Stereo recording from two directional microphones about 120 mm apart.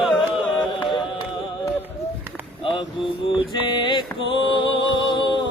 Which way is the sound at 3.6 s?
40° left (ahead or behind).